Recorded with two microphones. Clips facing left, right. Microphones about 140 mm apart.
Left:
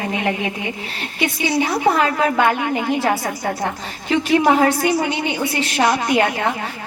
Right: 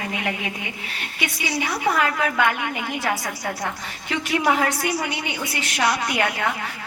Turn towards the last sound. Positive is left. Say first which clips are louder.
# left 6 dB
turn(degrees=30)  # may be behind; listen again after turning